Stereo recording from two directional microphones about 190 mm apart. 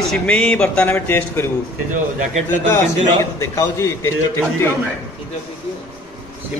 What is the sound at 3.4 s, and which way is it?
Speech, 15° left (ahead or behind).